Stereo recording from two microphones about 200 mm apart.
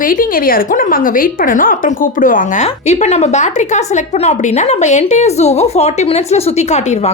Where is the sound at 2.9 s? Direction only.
35° left (ahead or behind).